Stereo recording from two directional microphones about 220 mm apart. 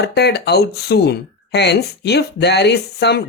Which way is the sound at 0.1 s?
50° left (ahead or behind).